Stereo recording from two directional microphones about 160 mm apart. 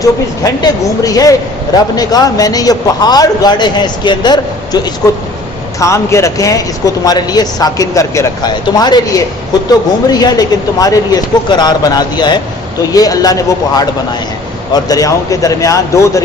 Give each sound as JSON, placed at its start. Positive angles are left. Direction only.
{"t": 0.0, "sound": "speech", "side_deg": 20}
{"t": 5.8, "sound": "speech", "side_deg": 20}
{"t": 14.7, "sound": "speech", "side_deg": 25}